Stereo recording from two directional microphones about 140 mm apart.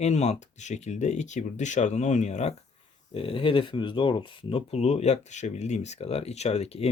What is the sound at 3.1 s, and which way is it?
Speech, 40° left (ahead or behind).